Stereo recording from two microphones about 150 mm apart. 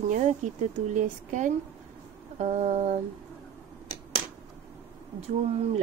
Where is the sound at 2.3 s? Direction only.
50° right (ahead or behind).